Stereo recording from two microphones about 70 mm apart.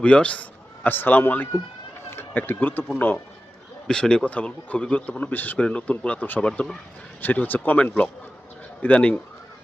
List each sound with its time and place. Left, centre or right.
0.0 s a man's voice: centre
3.8 s speech: centre; by 5.5 s left
5.5 s speech: centre
6.4 s speech: centre
7.2 s speech: left